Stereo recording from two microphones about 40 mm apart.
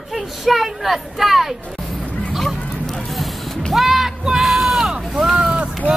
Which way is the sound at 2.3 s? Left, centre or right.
Centre.